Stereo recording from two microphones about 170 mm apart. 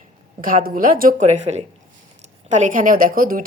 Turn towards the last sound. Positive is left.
turn(degrees=-55)  # may be behind; listen again after turning